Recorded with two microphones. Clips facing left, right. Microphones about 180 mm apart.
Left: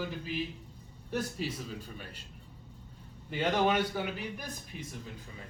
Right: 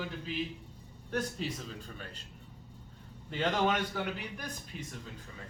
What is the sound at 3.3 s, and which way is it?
A man's voice, 10° left (ahead or behind).